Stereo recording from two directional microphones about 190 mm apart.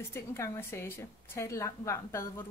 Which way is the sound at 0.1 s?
10° left (ahead or behind).